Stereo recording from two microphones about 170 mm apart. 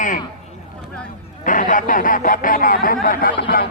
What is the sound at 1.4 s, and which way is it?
Speech, 50° left (ahead or behind).